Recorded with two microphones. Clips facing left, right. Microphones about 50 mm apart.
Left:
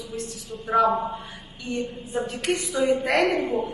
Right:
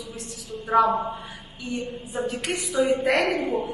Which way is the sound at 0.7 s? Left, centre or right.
Centre.